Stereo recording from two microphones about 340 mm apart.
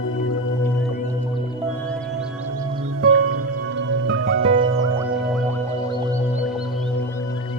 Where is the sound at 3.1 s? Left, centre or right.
Right.